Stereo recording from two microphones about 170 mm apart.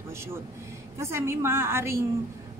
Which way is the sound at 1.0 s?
15° right (ahead or behind).